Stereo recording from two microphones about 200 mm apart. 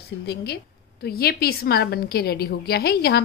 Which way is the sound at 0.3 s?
55° left (ahead or behind).